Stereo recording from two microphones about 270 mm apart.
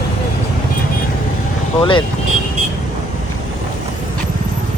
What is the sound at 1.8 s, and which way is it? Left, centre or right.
Speech, centre.